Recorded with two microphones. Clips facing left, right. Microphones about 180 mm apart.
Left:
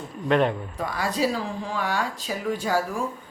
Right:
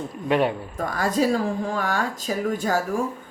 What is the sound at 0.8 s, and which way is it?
Speech, 45° right (ahead or behind).